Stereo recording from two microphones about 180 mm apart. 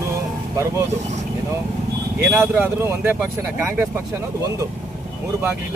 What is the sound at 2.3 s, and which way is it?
Speech, 10° right (ahead or behind).